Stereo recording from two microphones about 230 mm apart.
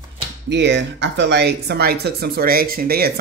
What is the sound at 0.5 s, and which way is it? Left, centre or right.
Speech, right.